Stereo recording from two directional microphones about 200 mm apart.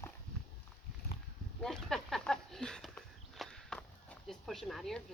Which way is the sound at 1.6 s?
Centre (ahead or behind).